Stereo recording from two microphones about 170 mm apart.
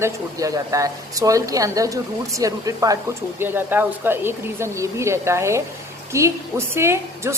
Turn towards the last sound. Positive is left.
turn(degrees=-15)  # may be behind; listen again after turning